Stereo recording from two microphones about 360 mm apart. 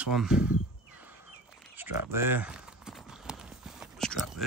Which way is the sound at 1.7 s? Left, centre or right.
Centre.